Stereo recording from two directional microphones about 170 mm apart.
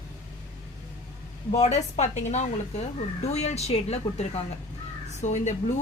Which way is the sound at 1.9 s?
40° left (ahead or behind).